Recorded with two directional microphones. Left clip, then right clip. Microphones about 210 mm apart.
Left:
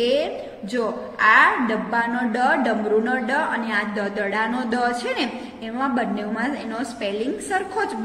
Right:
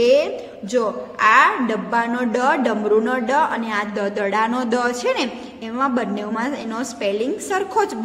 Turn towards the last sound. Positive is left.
turn(degrees=-45)  # may be behind; listen again after turning